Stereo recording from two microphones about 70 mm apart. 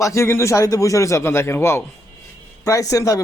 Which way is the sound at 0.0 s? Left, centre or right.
Left.